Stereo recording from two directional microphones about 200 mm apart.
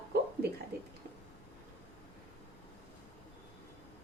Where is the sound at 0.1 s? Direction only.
50° right (ahead or behind).